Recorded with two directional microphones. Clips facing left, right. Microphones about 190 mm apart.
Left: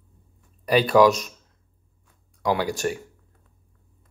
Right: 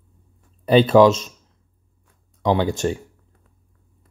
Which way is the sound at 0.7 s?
25° right (ahead or behind).